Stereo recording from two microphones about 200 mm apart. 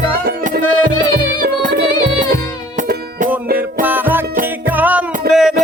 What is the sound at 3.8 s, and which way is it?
Music, 10° right (ahead or behind).